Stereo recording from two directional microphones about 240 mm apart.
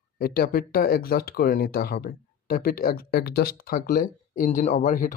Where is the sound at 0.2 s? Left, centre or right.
Left.